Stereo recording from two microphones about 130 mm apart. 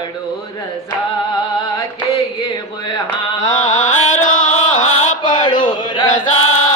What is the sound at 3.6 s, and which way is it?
Chant, 75° left (ahead or behind).